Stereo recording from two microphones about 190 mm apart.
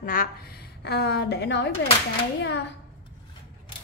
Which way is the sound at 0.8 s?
60° left (ahead or behind).